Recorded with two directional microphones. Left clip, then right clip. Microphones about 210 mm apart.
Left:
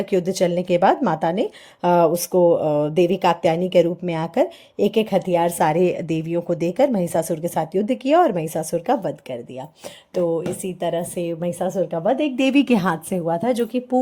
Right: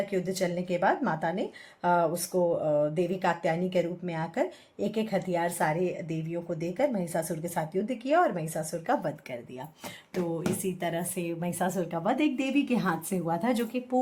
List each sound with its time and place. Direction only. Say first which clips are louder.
0.1 s speech: left 10 dB; 35° left (ahead or behind)
10.8 s a woman's voice: left 9 dB; 25° left (ahead or behind)
12.4 s speech: left 11 dB; 45° left (ahead or behind); by 14.0 s 25° left (ahead or behind)